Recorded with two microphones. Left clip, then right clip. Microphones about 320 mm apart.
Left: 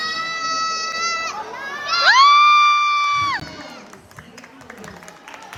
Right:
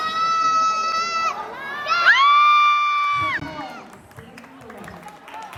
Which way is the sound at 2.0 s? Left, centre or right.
Centre.